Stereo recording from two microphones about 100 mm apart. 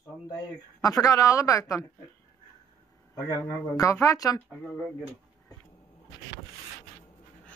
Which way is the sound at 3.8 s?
30° left (ahead or behind).